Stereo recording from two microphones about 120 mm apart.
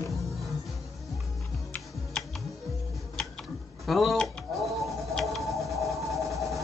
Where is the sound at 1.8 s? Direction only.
Centre (ahead or behind).